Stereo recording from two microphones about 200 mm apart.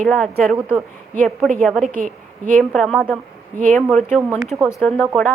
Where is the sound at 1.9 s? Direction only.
40° right (ahead or behind).